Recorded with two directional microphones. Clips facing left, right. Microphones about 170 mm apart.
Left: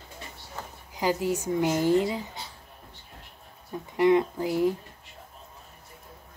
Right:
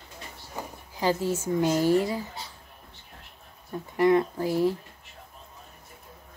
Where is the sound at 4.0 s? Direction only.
20° left (ahead or behind).